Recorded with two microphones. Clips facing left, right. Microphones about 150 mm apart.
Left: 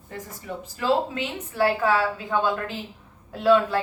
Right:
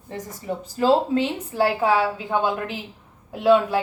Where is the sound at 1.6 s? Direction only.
20° right (ahead or behind).